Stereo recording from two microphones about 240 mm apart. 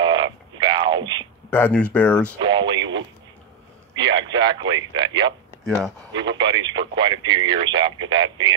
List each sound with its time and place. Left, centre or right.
0.0 s a sound: centre
1.5 s speech: centre
2.4 s radio: centre
3.9 s radio: centre
4.9 s speech: centre
5.6 s speech: centre
6.3 s speech: centre